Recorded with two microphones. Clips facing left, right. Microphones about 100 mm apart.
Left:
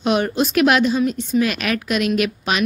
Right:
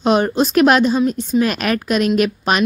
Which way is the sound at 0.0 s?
35° right (ahead or behind).